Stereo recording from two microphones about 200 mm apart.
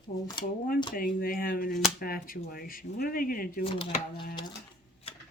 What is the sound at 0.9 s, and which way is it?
Speech, 45° left (ahead or behind).